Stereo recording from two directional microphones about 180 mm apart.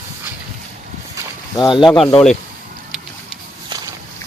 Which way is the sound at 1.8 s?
Centre (ahead or behind).